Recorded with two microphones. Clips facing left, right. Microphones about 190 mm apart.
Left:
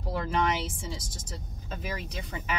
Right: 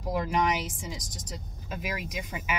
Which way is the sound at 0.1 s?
15° right (ahead or behind).